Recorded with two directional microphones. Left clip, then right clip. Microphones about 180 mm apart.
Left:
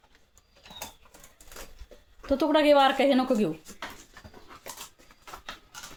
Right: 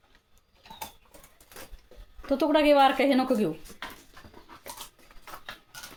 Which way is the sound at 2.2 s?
Centre (ahead or behind).